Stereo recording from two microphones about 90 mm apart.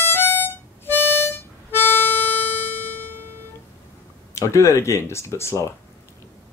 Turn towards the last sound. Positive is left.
turn(degrees=30)  # may be behind; listen again after turning